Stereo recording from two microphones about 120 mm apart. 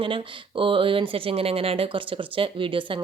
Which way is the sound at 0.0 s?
45° right (ahead or behind).